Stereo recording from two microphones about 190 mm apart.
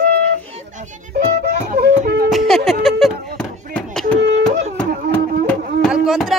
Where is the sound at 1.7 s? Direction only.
55° right (ahead or behind).